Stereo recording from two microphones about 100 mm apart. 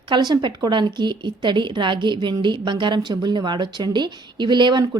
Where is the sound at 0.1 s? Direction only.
50° right (ahead or behind).